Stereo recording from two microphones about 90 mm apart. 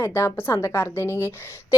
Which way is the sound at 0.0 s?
30° left (ahead or behind).